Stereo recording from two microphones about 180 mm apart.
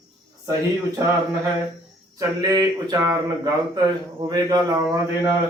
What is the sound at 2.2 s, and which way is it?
Speech, 20° right (ahead or behind).